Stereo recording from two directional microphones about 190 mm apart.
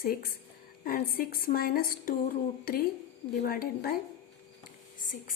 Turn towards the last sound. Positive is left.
turn(degrees=45)  # may be behind; listen again after turning